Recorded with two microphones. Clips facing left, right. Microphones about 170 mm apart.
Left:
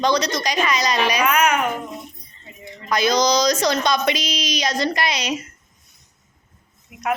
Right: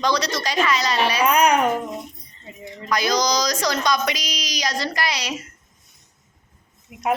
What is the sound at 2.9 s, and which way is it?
A child's voice, 25° left (ahead or behind).